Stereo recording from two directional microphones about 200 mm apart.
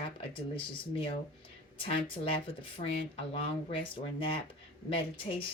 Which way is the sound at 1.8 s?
25° left (ahead or behind).